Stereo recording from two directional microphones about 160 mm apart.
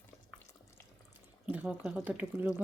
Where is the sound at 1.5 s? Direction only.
5° right (ahead or behind).